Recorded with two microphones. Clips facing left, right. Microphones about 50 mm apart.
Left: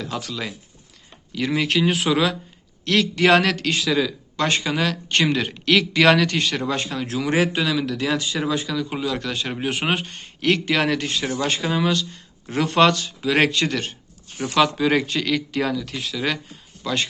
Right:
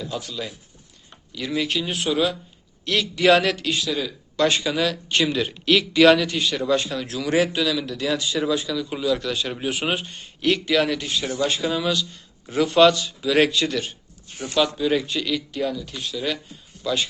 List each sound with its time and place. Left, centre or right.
0.0 s speech: left
1.3 s speech: left
1.7 s speech: left
2.8 s speech: left
4.4 s speech: left
5.0 s speech: left
6.1 s speech: left
6.5 s speech: left
11.6 s speech: left
14.4 s speech: left
16.8 s speech: left